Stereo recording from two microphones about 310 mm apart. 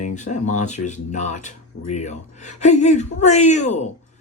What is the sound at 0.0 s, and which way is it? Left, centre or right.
Speech, left.